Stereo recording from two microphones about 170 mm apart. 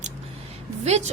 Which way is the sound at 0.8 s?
40° right (ahead or behind).